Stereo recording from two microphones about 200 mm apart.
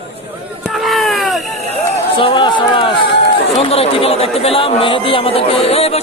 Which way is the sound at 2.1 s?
25° left (ahead or behind).